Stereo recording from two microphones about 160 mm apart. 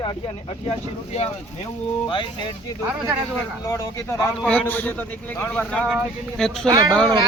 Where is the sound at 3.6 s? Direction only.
20° left (ahead or behind).